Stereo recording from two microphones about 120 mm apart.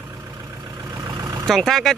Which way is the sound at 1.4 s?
Centre (ahead or behind).